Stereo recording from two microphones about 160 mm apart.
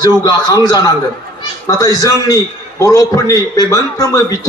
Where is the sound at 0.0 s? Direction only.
25° left (ahead or behind).